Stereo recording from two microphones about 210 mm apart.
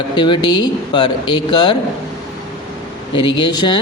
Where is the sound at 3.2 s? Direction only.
20° left (ahead or behind).